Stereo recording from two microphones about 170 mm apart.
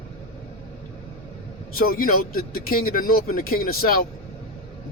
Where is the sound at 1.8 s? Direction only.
60° left (ahead or behind).